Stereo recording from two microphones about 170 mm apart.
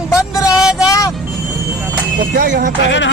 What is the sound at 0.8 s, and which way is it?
Speech, 20° left (ahead or behind).